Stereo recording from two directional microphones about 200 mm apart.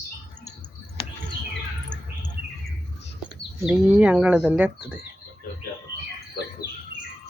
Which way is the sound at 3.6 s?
5° right (ahead or behind).